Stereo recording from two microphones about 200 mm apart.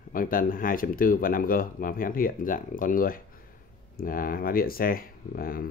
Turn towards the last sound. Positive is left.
turn(degrees=45)  # may be behind; listen again after turning